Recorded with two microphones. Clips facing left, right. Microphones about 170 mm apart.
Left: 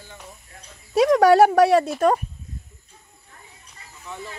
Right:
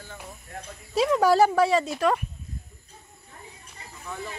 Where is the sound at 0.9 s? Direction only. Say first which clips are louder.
Left 6 dB; 70° left (ahead or behind).